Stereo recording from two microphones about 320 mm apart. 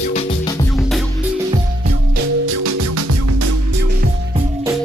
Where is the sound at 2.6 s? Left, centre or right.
Right.